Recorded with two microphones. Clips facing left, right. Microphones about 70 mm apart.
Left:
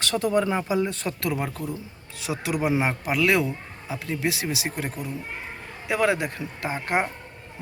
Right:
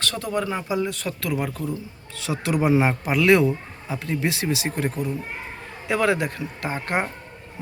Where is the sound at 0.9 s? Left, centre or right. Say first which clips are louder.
Even; left.